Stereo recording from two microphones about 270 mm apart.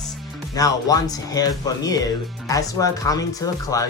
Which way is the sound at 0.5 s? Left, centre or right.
Centre.